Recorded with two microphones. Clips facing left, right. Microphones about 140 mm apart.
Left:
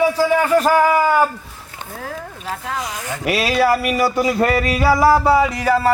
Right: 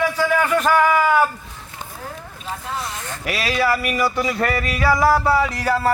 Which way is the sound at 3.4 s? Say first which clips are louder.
Left 3 dB; 45° left (ahead or behind).